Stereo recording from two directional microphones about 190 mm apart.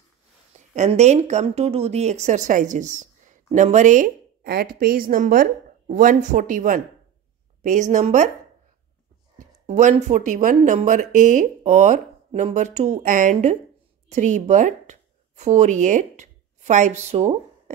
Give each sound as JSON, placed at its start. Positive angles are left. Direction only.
{"t": 0.7, "sound": "speech", "side_deg": -35}
{"t": 9.4, "sound": "speech", "side_deg": -40}